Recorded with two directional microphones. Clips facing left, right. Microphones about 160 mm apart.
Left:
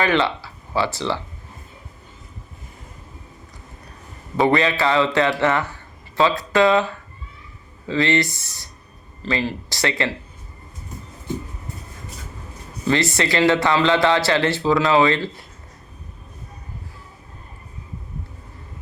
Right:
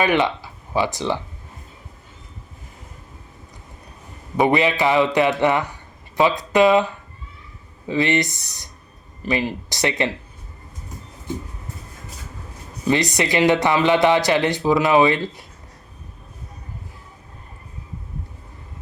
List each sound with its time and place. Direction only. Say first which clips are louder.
0.0 s speech: right 1 dB; 15° right (ahead or behind)
4.4 s speech: even; 15° right (ahead or behind)
12.8 s speech: even; 15° right (ahead or behind)